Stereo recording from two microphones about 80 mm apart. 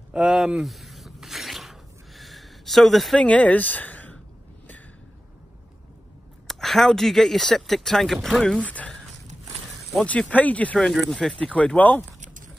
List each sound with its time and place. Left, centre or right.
0.1 s speech: centre
0.7 s a sound: centre
3.2 s speech: centre
6.4 s speech: centre
8.5 s a sound: centre
10.0 s speech: centre